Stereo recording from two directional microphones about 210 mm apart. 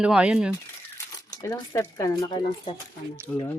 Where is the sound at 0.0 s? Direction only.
5° right (ahead or behind).